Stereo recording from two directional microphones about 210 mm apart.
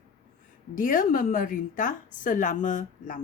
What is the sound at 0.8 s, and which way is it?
A woman's voice, 40° left (ahead or behind).